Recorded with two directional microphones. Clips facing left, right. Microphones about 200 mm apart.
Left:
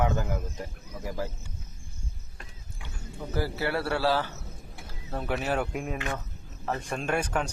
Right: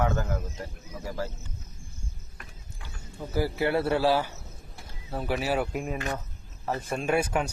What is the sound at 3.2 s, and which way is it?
Speech, 15° right (ahead or behind).